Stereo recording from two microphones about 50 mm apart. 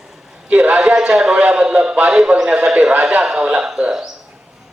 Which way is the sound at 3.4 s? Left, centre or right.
Right.